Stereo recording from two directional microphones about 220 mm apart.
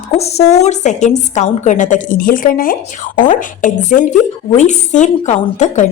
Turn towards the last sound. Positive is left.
turn(degrees=35)  # may be behind; listen again after turning